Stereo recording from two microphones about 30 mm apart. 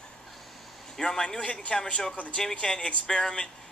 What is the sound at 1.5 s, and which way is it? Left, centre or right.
Speech, left.